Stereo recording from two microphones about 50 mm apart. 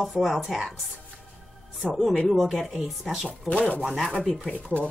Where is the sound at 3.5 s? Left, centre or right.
Left.